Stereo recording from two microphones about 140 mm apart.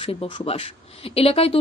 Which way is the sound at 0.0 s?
40° left (ahead or behind).